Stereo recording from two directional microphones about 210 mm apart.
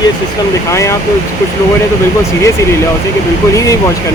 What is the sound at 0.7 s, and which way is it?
Speech, 15° left (ahead or behind).